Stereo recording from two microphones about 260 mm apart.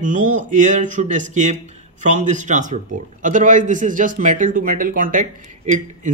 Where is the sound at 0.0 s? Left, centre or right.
Right.